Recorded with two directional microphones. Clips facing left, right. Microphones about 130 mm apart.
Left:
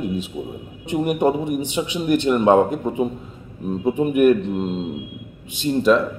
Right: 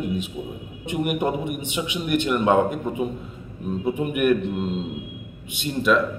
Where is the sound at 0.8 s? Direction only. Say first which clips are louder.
Left 5 dB; 30° left (ahead or behind).